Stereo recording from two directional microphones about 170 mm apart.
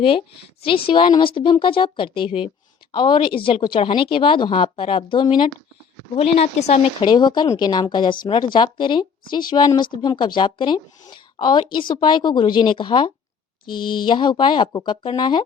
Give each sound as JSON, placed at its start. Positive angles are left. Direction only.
{"t": 0.6, "sound": "speech", "side_deg": 30}
{"t": 7.1, "sound": "speech", "side_deg": 25}